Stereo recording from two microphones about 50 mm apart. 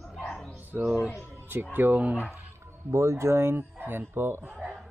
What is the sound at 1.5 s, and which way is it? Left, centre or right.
Speech, right.